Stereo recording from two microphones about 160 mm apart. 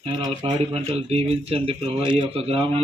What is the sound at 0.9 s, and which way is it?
Speech, 40° right (ahead or behind).